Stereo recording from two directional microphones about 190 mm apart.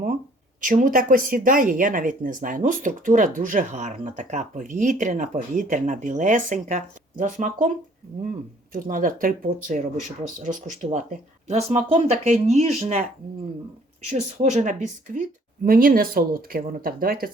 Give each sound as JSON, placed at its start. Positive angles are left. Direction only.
{"t": 0.6, "sound": "speech", "side_deg": -45}
{"t": 8.7, "sound": "speech", "side_deg": -45}
{"t": 14.1, "sound": "speech", "side_deg": -40}